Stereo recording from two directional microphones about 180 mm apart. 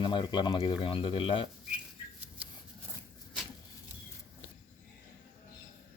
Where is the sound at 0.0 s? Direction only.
25° left (ahead or behind).